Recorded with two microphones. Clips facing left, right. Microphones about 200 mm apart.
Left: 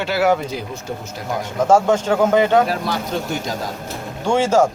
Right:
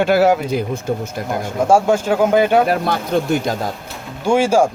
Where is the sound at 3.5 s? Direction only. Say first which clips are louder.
Right 5 dB; 55° right (ahead or behind).